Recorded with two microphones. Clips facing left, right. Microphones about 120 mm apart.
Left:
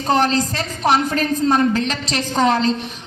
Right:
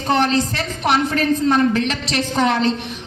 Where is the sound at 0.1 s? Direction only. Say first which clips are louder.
Even; 35° left (ahead or behind).